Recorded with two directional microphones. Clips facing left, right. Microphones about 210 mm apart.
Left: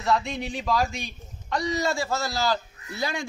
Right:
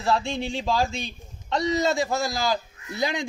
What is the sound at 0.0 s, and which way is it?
A man's voice, 30° right (ahead or behind).